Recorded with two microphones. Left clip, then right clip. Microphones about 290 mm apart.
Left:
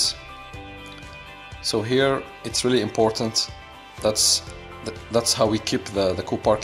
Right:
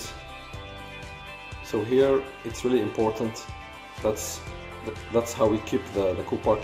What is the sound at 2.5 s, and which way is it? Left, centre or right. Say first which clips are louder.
Speech: left 4 dB; left.